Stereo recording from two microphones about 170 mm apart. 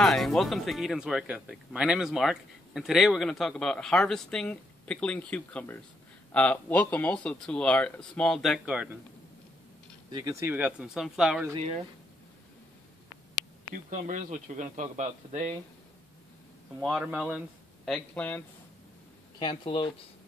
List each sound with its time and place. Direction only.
0.0 s speech: centre (ahead or behind)
10.1 s speech: 20° right (ahead or behind); by 11.4 s 5° right (ahead or behind)
13.8 s speech: 50° right (ahead or behind)
16.8 s speech: 5° right (ahead or behind)
17.8 s speech: 5° left (ahead or behind)
19.3 s speech: 30° left (ahead or behind)